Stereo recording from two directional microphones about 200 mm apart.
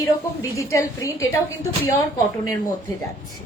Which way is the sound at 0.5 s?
15° left (ahead or behind).